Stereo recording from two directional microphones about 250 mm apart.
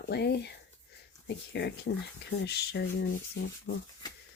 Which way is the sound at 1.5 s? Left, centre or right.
Left.